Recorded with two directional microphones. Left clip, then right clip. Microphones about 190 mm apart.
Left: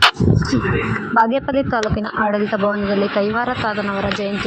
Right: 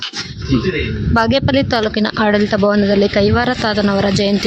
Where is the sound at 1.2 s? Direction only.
25° right (ahead or behind).